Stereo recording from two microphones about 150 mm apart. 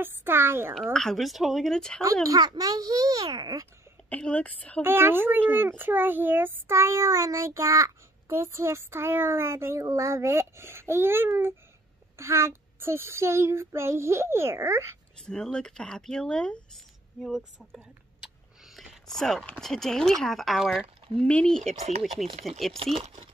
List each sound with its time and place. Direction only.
0.0 s a child's voice: 15° right (ahead or behind)
0.9 s speech: centre (ahead or behind)
2.2 s a child's voice: 25° right (ahead or behind)
4.1 s a woman's voice: 10° left (ahead or behind)
4.8 s a child's voice: 15° right (ahead or behind)
15.1 s speech: 5° left (ahead or behind)
19.0 s speech: 5° left (ahead or behind)
21.7 s speech: 45° right (ahead or behind)
23.0 s speech: 50° right (ahead or behind)